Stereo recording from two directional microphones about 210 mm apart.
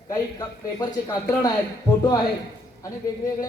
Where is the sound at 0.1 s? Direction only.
15° left (ahead or behind).